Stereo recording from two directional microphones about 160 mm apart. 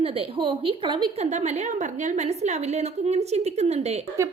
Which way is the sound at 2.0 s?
45° right (ahead or behind).